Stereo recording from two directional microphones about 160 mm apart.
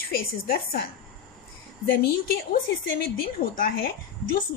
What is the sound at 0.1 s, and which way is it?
Speech, 70° left (ahead or behind).